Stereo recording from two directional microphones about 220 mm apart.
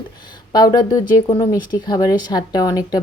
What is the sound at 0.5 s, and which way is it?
Speech, 15° left (ahead or behind).